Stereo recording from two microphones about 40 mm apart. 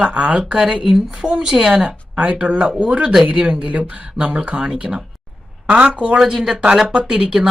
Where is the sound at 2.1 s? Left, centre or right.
Right.